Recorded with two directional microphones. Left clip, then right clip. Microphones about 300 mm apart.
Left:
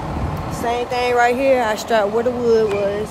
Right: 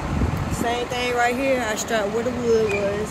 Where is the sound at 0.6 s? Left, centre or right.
Centre.